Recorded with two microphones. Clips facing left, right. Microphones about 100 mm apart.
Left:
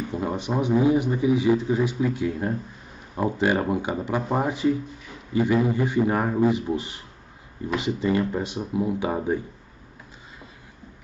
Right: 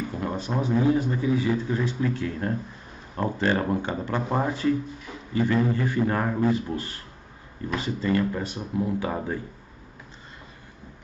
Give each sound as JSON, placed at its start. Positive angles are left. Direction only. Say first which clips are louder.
{"t": 0.3, "sound": "speech", "louder": "left 3 dB", "side_deg": 15}